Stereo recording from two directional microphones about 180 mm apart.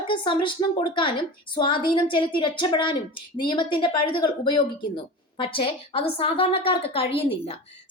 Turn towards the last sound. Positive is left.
turn(degrees=30)  # may be behind; listen again after turning